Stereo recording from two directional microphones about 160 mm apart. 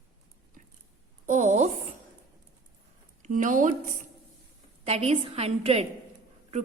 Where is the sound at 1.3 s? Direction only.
50° right (ahead or behind).